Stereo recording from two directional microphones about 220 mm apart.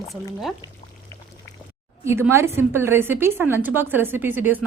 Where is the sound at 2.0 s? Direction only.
10° right (ahead or behind).